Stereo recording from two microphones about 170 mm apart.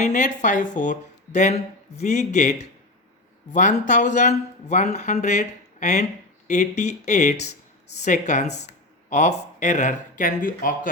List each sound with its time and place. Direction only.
0.0 s speech: 45° left (ahead or behind)